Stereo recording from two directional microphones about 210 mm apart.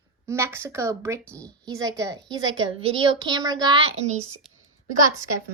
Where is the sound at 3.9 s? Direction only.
30° right (ahead or behind).